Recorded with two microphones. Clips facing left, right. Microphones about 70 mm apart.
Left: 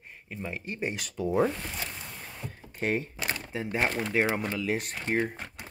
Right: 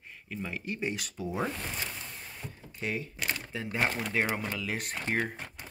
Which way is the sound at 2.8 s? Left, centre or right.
Left.